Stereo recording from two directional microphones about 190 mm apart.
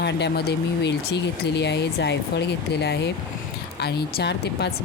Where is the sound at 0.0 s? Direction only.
60° left (ahead or behind).